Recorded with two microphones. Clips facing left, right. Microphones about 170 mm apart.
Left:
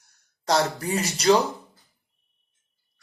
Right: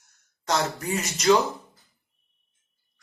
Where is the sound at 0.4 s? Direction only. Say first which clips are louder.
Left 3 dB; 35° left (ahead or behind).